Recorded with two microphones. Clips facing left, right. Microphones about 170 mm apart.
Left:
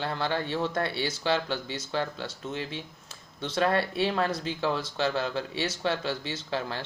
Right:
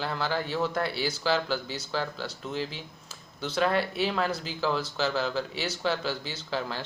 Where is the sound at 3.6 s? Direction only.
30° left (ahead or behind).